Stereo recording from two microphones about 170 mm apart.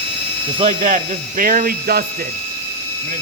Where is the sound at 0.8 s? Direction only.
50° right (ahead or behind).